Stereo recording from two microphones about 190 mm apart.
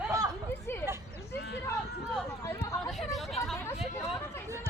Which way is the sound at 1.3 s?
60° left (ahead or behind).